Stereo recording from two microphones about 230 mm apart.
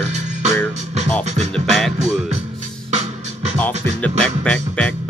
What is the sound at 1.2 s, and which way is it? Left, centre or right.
Music, right.